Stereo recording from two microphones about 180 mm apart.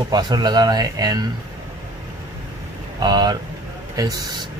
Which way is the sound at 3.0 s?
25° right (ahead or behind).